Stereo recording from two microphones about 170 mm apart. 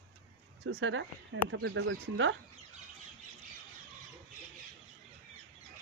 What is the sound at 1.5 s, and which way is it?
Speech, 90° right.